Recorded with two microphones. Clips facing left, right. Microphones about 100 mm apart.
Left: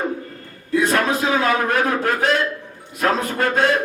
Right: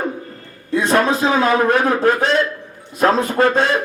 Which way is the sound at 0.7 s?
30° right (ahead or behind).